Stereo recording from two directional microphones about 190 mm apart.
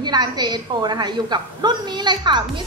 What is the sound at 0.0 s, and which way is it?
A woman's voice, 20° right (ahead or behind).